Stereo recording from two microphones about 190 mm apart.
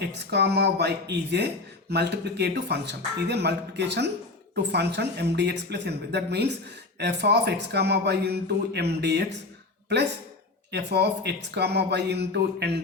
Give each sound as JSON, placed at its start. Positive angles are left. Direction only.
{"t": 0.0, "sound": "speech", "side_deg": -60}
{"t": 10.7, "sound": "speech", "side_deg": -60}